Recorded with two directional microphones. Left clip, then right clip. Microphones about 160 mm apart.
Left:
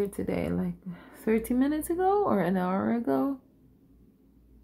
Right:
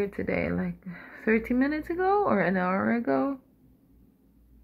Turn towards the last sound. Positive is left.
turn(degrees=40)  # may be behind; listen again after turning